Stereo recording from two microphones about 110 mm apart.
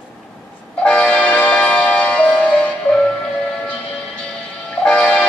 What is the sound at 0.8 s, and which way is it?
Music, 10° left (ahead or behind).